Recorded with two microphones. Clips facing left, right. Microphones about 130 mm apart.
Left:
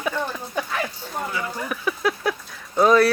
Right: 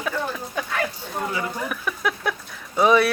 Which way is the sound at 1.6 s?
Centre (ahead or behind).